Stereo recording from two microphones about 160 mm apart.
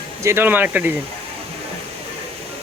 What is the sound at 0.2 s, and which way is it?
Speech, 15° right (ahead or behind).